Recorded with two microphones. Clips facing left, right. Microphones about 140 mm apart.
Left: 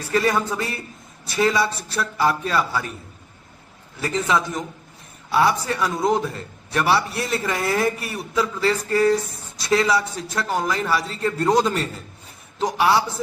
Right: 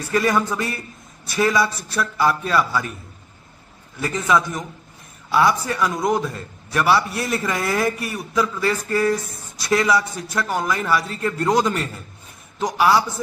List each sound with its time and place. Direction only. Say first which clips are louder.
0.1 s a man's voice: right 1 dB; 30° left (ahead or behind)
4.0 s a man's voice: right 2 dB; 30° left (ahead or behind)